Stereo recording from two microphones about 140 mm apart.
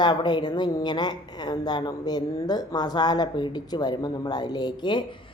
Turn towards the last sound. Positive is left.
turn(degrees=35)  # may be behind; listen again after turning